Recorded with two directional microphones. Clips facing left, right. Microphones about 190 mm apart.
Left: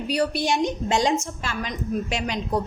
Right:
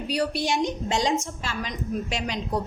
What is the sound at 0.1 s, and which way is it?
A woman's voice, 55° left (ahead or behind).